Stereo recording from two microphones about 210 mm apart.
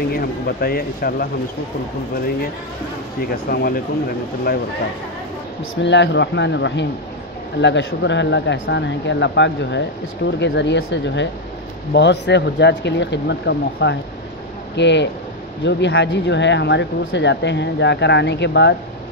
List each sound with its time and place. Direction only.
0.1 s speech: 45° left (ahead or behind)
3.2 s speech: 45° left (ahead or behind)
5.8 s speech: 60° left (ahead or behind)